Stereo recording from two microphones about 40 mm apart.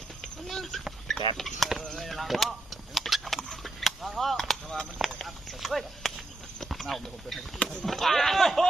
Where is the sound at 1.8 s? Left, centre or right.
Centre.